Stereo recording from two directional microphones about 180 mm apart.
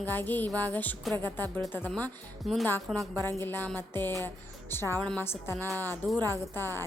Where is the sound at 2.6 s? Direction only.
10° left (ahead or behind).